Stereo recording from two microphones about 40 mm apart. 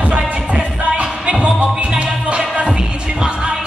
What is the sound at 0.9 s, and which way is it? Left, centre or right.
Music, right.